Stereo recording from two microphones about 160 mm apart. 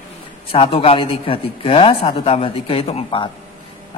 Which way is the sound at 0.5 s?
35° left (ahead or behind).